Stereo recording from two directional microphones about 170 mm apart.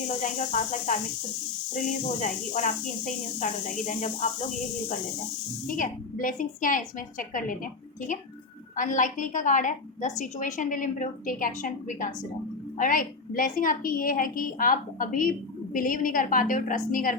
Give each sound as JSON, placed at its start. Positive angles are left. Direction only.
{"t": 0.2, "sound": "a woman's voice", "side_deg": 45}
{"t": 5.6, "sound": "a woman's voice", "side_deg": 50}